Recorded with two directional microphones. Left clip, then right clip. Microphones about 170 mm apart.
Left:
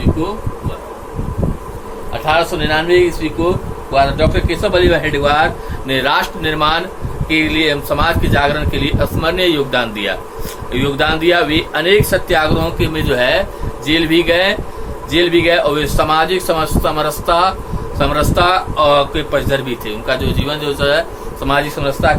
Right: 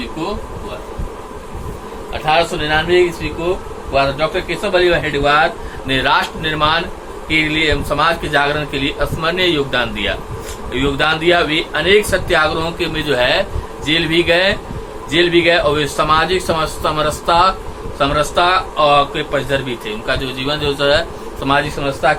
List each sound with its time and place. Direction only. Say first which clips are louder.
2.1 s a man's voice: even; 20° left (ahead or behind)
20.2 s a man's voice: even; 15° left (ahead or behind)